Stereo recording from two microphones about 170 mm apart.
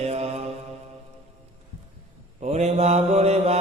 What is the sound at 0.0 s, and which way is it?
Mantra, 40° right (ahead or behind).